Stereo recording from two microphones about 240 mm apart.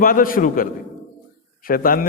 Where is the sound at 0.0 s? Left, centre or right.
Left.